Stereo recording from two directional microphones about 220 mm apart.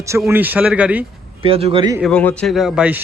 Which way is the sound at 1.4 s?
25° right (ahead or behind).